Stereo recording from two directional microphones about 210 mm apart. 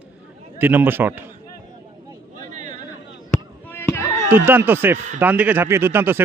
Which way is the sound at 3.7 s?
10° left (ahead or behind).